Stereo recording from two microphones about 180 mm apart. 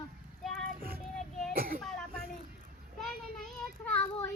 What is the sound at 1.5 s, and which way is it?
Speech, 55° right (ahead or behind).